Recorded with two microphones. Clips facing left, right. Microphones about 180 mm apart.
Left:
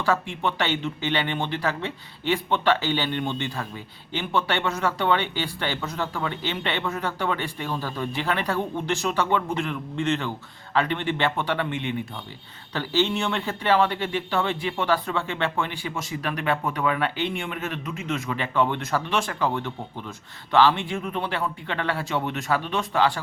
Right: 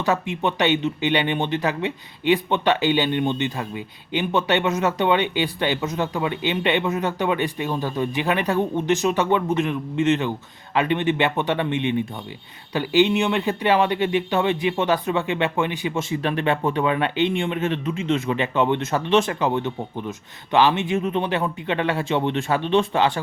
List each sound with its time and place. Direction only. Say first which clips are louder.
0.0 s speech: right 3 dB; 20° right (ahead or behind)